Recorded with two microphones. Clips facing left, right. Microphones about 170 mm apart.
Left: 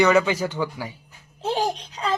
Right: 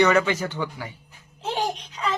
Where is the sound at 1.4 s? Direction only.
35° left (ahead or behind).